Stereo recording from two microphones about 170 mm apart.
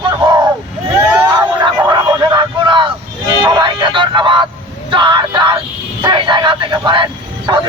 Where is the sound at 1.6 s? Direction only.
25° right (ahead or behind).